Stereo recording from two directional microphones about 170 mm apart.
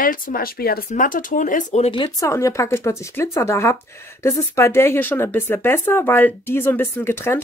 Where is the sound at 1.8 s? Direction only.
30° left (ahead or behind).